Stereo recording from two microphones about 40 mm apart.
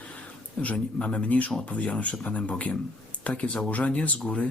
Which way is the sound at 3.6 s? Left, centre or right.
Left.